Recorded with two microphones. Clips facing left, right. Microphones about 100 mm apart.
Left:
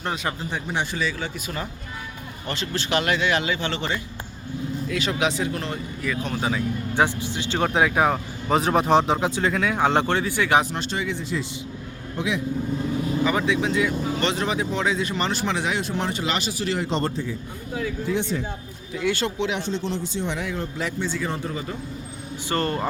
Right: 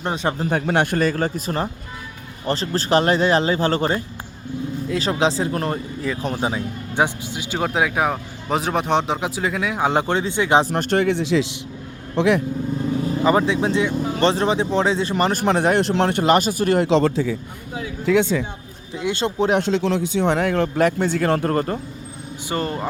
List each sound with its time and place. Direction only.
0.0 s speech: 25° right (ahead or behind)
0.6 s a man's voice: 60° right (ahead or behind); by 4.0 s 45° right (ahead or behind)
4.9 s speech: 30° right (ahead or behind)
10.7 s speech: 55° right (ahead or behind); by 11.6 s 90° right
12.1 s speech: 65° right (ahead or behind)
13.2 s speech: 30° right (ahead or behind)
15.2 s a man's voice: 50° right (ahead or behind)
15.9 s a man's voice: 65° right (ahead or behind)
16.9 s a man's voice: 85° right
18.9 s speech: 20° right (ahead or behind)
19.4 s a man's voice: 50° right (ahead or behind)
19.6 s speech: 85° right; by 21.8 s 65° right (ahead or behind)
22.4 s speech: 10° right (ahead or behind)